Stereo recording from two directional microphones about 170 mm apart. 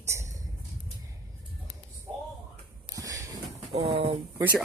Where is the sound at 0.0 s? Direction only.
15° right (ahead or behind).